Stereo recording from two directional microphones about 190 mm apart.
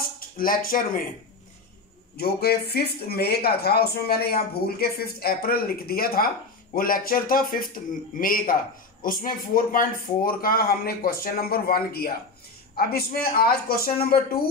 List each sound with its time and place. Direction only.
0.4 s speech: 50° left (ahead or behind)
2.1 s speech: 55° left (ahead or behind)